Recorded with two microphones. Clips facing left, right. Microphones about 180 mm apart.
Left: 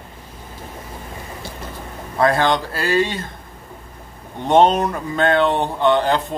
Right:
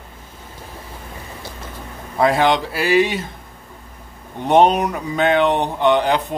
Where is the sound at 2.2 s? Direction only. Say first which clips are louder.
Right 1 dB; 10° right (ahead or behind).